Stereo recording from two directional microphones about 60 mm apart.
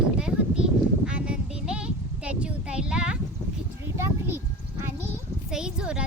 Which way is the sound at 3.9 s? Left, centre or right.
Right.